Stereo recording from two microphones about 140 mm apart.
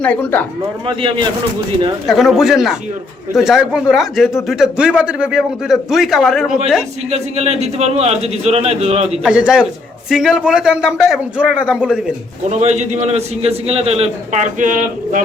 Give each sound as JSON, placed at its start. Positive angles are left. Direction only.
{"t": 0.0, "sound": "a man's voice", "side_deg": 15}
{"t": 2.0, "sound": "a man's voice", "side_deg": 0}
{"t": 7.1, "sound": "speech", "side_deg": -50}
{"t": 9.2, "sound": "a man's voice", "side_deg": -5}
{"t": 12.5, "sound": "speech", "side_deg": -55}
{"t": 14.6, "sound": "speech", "side_deg": -70}